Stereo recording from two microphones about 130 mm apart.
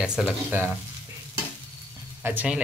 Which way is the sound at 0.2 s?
Centre (ahead or behind).